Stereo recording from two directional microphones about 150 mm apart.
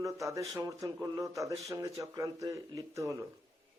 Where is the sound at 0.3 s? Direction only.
20° right (ahead or behind).